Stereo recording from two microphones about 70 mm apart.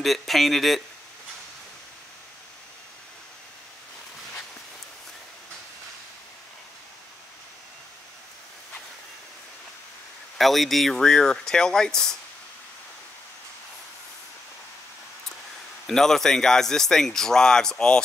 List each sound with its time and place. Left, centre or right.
0.0 s speech: centre
10.3 s speech: centre
15.9 s speech: centre